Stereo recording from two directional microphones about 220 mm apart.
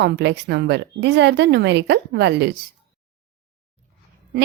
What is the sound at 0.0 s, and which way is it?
A woman's voice, 50° right (ahead or behind).